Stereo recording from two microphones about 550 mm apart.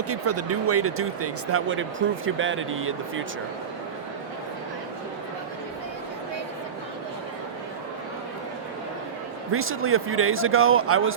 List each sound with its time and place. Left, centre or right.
0.1 s speech: right
9.5 s speech: right